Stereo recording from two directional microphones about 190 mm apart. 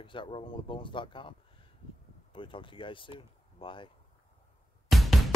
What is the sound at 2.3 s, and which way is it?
Speech, 25° left (ahead or behind).